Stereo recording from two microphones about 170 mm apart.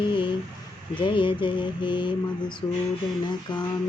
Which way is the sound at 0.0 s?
30° left (ahead or behind).